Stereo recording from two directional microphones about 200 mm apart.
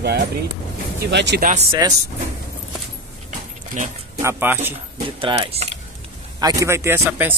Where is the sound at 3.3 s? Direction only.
35° right (ahead or behind).